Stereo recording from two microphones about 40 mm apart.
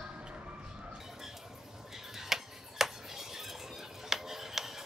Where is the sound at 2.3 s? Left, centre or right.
Centre.